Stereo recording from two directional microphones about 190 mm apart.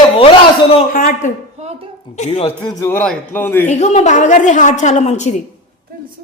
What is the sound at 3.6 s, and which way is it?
A woman's voice, 35° left (ahead or behind).